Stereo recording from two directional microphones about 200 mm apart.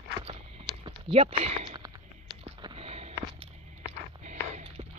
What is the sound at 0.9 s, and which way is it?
Speech, 25° right (ahead or behind).